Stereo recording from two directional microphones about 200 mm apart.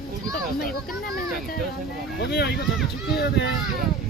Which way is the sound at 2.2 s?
55° left (ahead or behind).